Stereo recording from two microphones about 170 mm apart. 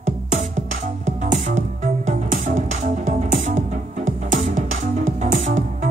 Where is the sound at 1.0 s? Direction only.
45° right (ahead or behind).